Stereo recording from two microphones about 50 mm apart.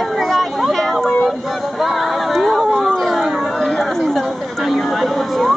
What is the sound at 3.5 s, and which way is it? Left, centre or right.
Chatter, centre.